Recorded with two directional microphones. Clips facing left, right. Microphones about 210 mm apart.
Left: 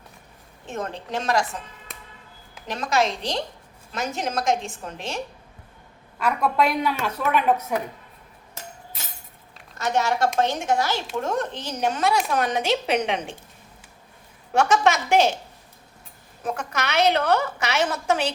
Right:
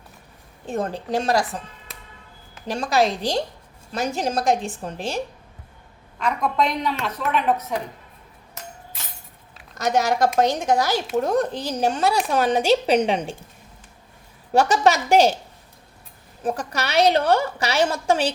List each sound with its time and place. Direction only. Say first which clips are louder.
0.7 s a woman's voice: right 5 dB; 35° right (ahead or behind)
2.6 s a woman's voice: right 3 dB; 30° right (ahead or behind)
6.1 s a woman's voice: even; 10° left (ahead or behind)
9.7 s a woman's voice: right 3 dB; 40° right (ahead or behind)
14.5 s a woman's voice: right 2 dB; 35° right (ahead or behind)
16.4 s a woman's voice: right 3 dB; 35° right (ahead or behind)